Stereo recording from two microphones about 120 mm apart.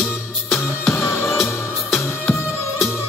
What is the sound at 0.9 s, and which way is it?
Music, 20° left (ahead or behind).